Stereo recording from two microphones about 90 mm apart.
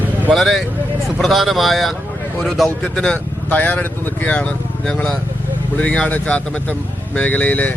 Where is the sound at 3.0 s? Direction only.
15° left (ahead or behind).